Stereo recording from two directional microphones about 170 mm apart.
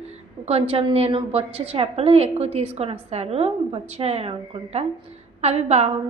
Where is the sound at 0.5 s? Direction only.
35° right (ahead or behind).